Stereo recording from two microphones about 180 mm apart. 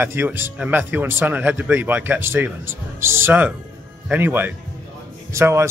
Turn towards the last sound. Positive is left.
turn(degrees=-15)  # may be behind; listen again after turning